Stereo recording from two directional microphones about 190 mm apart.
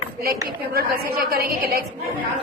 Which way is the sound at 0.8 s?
55° right (ahead or behind).